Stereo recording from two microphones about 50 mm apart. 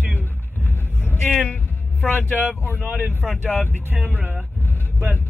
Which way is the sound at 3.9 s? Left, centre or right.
Right.